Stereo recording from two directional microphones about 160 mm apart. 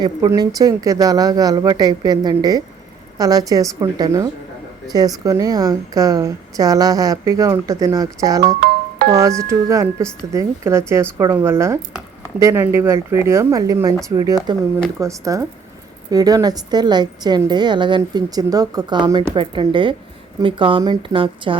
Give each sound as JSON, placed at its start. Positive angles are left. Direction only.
{"t": 0.0, "sound": "a woman's voice", "side_deg": -25}
{"t": 9.5, "sound": "a woman's voice", "side_deg": -15}